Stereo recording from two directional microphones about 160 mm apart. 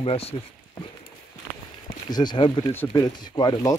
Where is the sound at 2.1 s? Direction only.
25° left (ahead or behind).